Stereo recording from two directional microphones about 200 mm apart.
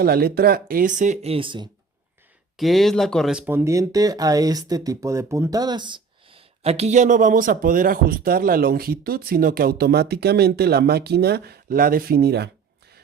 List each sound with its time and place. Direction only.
0.0 s speech: 50° right (ahead or behind); by 1.7 s 25° right (ahead or behind)
2.6 s speech: centre (ahead or behind); by 12.5 s 55° right (ahead or behind)